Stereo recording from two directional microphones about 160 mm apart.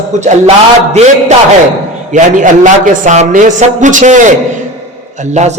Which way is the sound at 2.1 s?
50° right (ahead or behind).